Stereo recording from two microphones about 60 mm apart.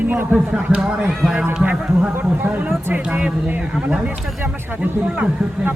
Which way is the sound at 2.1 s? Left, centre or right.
Right.